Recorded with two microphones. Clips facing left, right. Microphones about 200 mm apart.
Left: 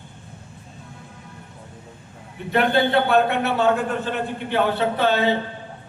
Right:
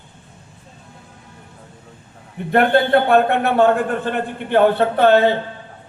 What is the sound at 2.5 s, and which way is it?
A man's voice, 55° right (ahead or behind).